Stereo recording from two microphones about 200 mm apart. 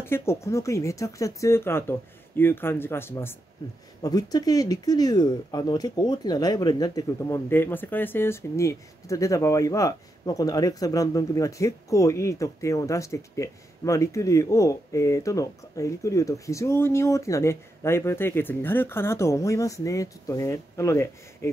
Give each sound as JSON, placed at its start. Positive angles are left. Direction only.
{"t": 0.0, "sound": "speech", "side_deg": 10}